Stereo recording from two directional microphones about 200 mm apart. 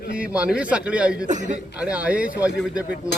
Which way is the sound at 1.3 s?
35° right (ahead or behind).